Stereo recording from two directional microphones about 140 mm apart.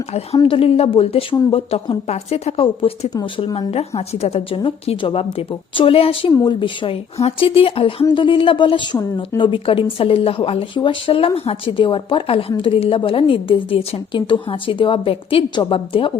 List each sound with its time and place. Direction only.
0.4 s a woman's voice: 40° left (ahead or behind)